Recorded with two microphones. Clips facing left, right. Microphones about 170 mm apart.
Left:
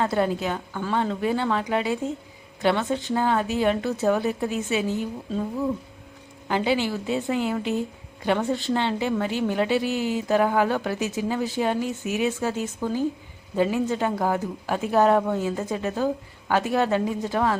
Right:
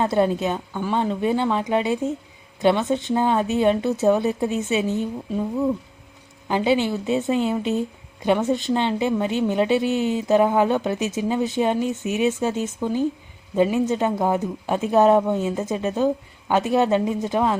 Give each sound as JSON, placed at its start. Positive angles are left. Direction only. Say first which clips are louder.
{"t": 0.0, "sound": "a woman's voice", "louder": "right 3 dB", "side_deg": -20}
{"t": 6.5, "sound": "a woman's voice", "louder": "right 3 dB", "side_deg": -20}